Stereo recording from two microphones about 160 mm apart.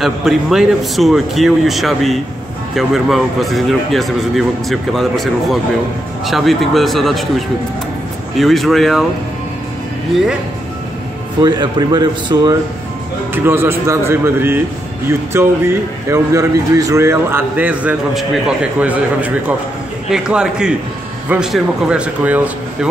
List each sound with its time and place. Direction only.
0.0 s a man's voice: centre (ahead or behind)
11.4 s speech: 25° right (ahead or behind)
13.3 s a man's voice: 15° right (ahead or behind)